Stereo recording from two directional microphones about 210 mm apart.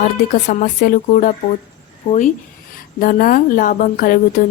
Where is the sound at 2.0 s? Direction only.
25° left (ahead or behind).